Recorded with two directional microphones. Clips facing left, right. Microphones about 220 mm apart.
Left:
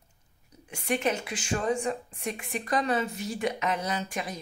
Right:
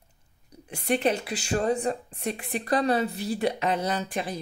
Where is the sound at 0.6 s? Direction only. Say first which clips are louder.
Right 3 dB; 35° right (ahead or behind).